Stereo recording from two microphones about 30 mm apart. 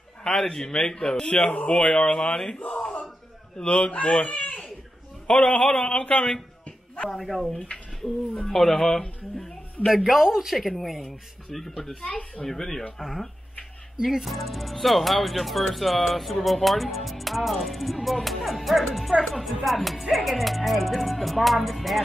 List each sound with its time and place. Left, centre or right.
0.2 s a man's voice: centre
1.2 s a man's voice: left
2.2 s a man's voice: left
2.7 s a sound: left
3.6 s speech: left
5.4 s a man's voice: left
7.1 s speech: centre
9.8 s speech: centre
10.7 s speech: centre
12.1 s speech: left
12.4 s speech: centre
14.0 s speech: centre